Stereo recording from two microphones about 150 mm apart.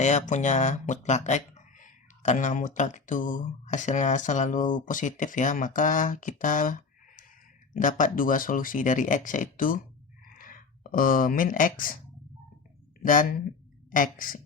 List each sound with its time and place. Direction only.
0.0 s speech: 50° left (ahead or behind); by 11.9 s 65° left (ahead or behind)
13.0 s speech: 65° left (ahead or behind)